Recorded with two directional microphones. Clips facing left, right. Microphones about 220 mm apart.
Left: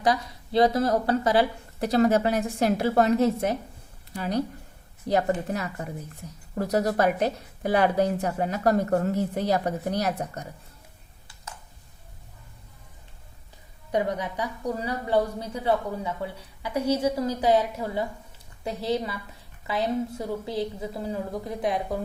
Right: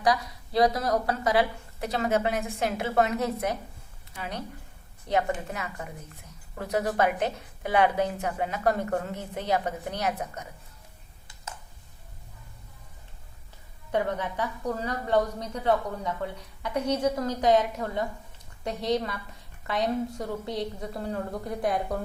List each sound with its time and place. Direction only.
0.0 s a woman's voice: 25° left (ahead or behind)
13.9 s a woman's voice: 15° left (ahead or behind)